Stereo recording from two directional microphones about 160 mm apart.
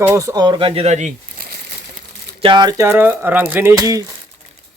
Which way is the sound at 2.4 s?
30° right (ahead or behind).